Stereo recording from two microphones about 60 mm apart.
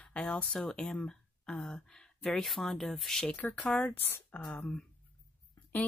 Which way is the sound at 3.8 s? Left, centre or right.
Left.